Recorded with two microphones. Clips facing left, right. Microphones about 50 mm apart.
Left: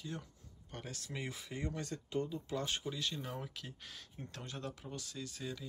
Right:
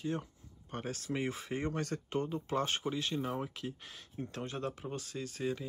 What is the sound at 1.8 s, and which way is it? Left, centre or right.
Speech, right.